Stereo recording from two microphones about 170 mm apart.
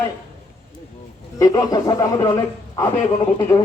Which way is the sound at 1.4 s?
20° left (ahead or behind).